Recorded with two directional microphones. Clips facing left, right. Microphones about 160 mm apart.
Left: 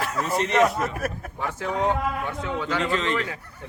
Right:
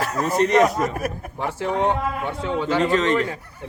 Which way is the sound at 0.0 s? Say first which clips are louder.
Right 5 dB; 40° right (ahead or behind).